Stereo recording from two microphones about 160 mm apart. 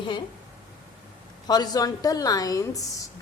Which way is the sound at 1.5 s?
25° left (ahead or behind).